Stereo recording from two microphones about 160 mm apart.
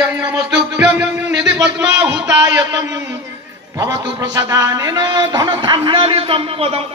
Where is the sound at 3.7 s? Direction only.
20° right (ahead or behind); by 6.8 s 35° right (ahead or behind).